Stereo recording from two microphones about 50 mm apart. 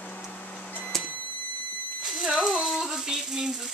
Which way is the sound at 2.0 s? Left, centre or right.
Centre.